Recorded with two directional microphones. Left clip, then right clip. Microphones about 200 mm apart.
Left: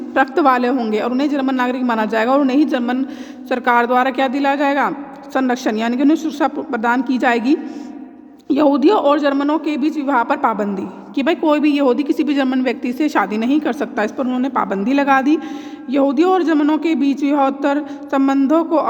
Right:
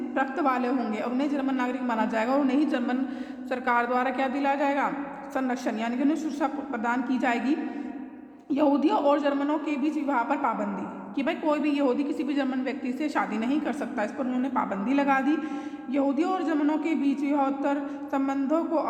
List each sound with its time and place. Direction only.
0.1 s a man's voice: 40° left (ahead or behind)